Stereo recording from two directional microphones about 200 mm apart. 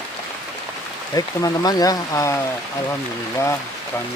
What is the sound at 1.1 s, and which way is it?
Speech, 20° left (ahead or behind).